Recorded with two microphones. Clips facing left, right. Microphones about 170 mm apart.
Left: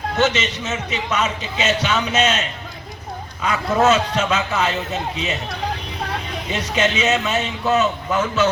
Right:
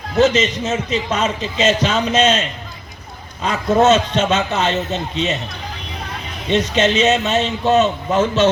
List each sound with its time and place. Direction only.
0.2 s a man's voice: 35° right (ahead or behind)
3.4 s a man's voice: 25° right (ahead or behind)
6.5 s a man's voice: 30° right (ahead or behind)